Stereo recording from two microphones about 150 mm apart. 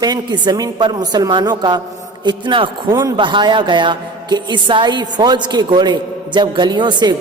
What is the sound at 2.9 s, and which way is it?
Speech, 20° right (ahead or behind).